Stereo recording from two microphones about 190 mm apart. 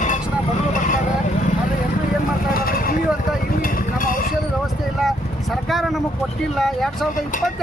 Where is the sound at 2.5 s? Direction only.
50° left (ahead or behind).